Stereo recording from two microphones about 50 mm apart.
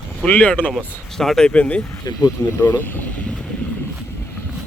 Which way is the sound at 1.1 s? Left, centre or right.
Centre.